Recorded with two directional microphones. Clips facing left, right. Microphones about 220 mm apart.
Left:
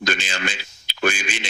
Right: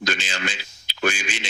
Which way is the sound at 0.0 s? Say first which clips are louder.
Left 2 dB; 55° left (ahead or behind).